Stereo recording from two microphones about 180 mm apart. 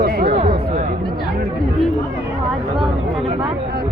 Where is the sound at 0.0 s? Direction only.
60° right (ahead or behind).